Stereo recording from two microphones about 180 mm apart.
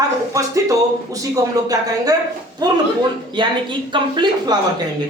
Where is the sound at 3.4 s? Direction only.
25° right (ahead or behind).